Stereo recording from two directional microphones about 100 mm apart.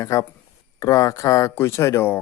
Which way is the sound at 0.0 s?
35° left (ahead or behind).